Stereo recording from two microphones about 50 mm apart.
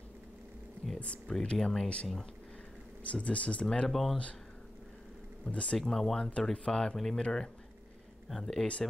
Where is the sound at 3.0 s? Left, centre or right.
Left.